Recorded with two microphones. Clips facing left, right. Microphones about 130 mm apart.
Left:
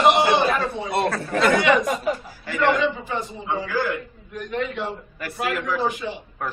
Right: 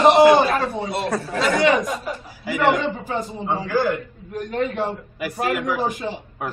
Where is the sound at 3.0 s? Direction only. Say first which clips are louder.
Right 3 dB; 45° right (ahead or behind).